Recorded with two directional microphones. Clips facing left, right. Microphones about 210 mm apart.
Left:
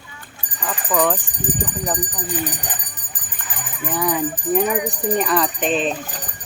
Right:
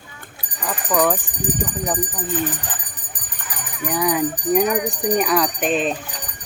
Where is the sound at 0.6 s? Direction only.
5° right (ahead or behind).